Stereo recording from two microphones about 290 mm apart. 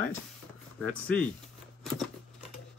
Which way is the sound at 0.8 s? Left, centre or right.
Right.